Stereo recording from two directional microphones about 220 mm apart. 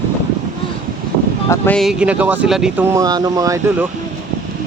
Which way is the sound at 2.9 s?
15° right (ahead or behind).